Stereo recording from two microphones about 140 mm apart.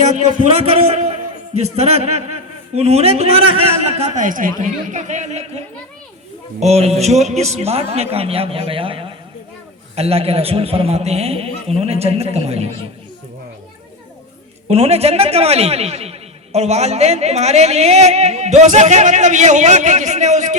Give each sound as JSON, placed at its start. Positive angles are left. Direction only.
{"t": 0.1, "sound": "a man's voice", "side_deg": -55}
{"t": 4.6, "sound": "a man's voice", "side_deg": -60}
{"t": 14.7, "sound": "a man's voice", "side_deg": -45}